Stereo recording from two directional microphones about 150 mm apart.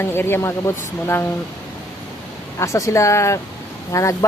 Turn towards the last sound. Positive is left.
turn(degrees=20)  # may be behind; listen again after turning